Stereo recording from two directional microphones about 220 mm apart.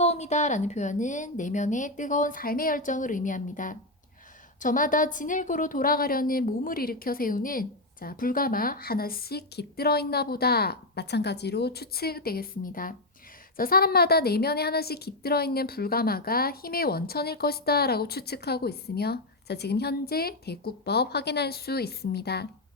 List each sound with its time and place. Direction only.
0.0 s a woman's voice: 30° left (ahead or behind); by 22.4 s 45° left (ahead or behind)